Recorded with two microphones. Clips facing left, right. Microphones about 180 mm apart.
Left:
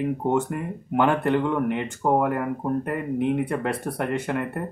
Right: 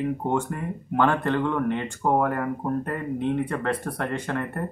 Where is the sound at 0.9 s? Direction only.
15° left (ahead or behind).